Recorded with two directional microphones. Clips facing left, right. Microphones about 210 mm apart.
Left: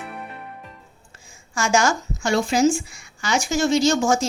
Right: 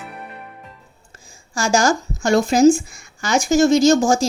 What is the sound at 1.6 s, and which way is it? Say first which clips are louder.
A woman's voice: right 3 dB; 35° right (ahead or behind).